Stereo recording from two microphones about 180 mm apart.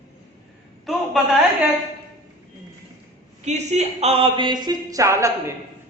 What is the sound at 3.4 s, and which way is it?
Speech, 40° right (ahead or behind).